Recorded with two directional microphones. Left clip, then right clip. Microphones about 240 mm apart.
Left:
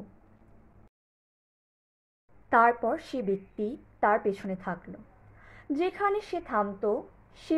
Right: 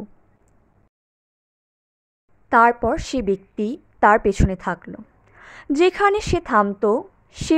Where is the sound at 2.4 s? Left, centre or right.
Right.